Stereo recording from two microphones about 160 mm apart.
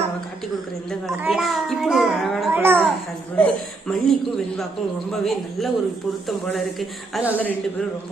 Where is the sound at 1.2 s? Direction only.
Centre (ahead or behind).